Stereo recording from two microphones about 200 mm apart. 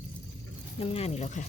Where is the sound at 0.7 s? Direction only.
30° left (ahead or behind).